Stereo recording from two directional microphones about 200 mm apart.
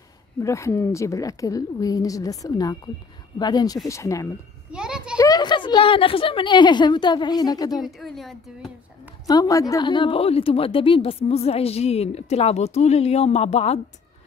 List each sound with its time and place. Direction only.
0.4 s a woman's voice: 15° left (ahead or behind)
4.7 s a sound: 5° right (ahead or behind)
5.1 s a woman's voice: 15° left (ahead or behind)
7.8 s speech: centre (ahead or behind)
9.3 s a woman's voice: 15° left (ahead or behind)